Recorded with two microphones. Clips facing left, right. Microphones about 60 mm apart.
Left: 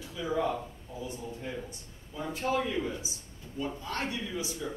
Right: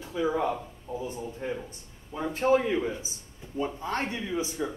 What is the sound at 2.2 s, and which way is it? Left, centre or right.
Speech, right.